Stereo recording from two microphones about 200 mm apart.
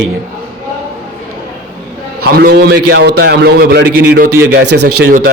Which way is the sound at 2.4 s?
55° right (ahead or behind).